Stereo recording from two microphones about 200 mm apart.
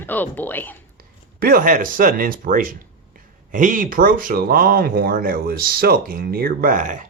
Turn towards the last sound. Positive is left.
turn(degrees=-40)  # may be behind; listen again after turning